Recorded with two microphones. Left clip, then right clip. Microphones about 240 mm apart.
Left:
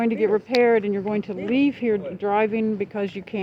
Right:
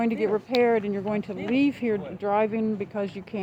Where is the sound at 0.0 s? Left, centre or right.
Left.